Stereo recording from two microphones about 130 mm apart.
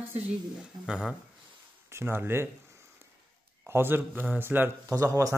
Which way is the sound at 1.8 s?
20° right (ahead or behind).